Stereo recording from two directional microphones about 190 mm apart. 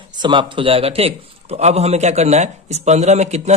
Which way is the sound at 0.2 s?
25° right (ahead or behind).